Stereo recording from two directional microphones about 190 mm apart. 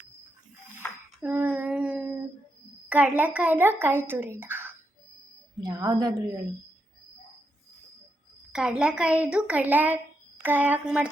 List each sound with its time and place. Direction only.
1.2 s child singing: 10° right (ahead or behind)
2.9 s a woman's voice: 10° right (ahead or behind)
8.5 s a woman's voice: 5° right (ahead or behind)